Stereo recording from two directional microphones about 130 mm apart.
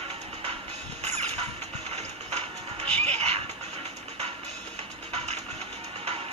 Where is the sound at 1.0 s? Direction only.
55° right (ahead or behind).